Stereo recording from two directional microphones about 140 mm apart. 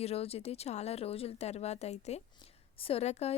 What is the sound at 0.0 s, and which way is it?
A woman's voice, 45° left (ahead or behind).